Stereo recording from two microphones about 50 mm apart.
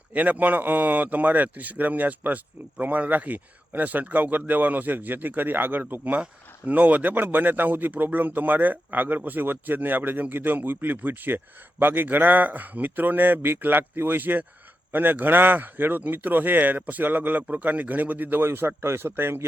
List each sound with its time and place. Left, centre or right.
0.1 s speech: right